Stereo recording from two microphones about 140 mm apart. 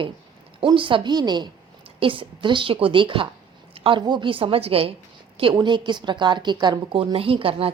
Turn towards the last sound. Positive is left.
turn(degrees=-40)  # may be behind; listen again after turning